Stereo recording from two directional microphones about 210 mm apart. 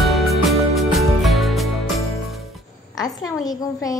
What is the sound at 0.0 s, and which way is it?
Music, centre (ahead or behind).